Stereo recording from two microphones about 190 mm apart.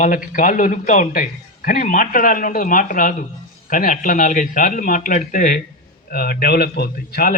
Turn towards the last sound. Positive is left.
turn(degrees=50)  # may be behind; listen again after turning